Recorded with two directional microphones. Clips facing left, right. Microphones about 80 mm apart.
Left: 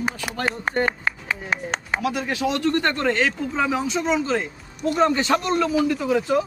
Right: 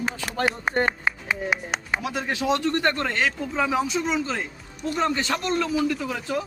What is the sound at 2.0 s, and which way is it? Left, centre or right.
Speech, right.